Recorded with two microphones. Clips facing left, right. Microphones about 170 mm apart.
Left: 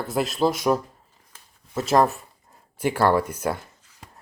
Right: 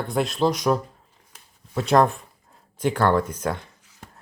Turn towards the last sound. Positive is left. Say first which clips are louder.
# even
turn(degrees=5)  # may be behind; listen again after turning